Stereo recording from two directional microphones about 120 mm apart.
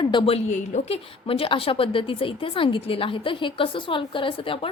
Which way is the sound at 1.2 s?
50° left (ahead or behind).